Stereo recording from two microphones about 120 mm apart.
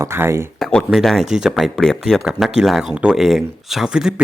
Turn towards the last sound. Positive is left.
turn(degrees=-5)  # may be behind; listen again after turning